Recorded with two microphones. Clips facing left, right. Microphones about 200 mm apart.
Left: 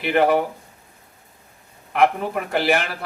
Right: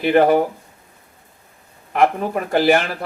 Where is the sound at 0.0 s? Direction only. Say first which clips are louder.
Right 4 dB; 40° right (ahead or behind).